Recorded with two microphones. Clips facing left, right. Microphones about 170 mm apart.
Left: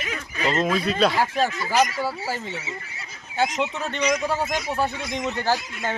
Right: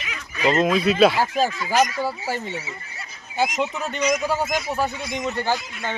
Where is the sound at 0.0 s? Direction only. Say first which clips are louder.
Left 4 dB; 40° left (ahead or behind).